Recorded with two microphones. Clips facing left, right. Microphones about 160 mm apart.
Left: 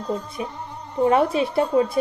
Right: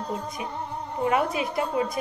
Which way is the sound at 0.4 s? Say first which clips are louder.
Left 1 dB; 35° left (ahead or behind).